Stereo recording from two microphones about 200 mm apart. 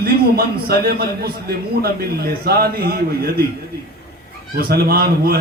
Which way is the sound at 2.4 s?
50° right (ahead or behind).